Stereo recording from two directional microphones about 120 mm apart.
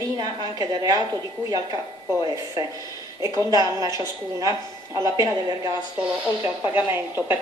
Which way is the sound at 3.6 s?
25° right (ahead or behind).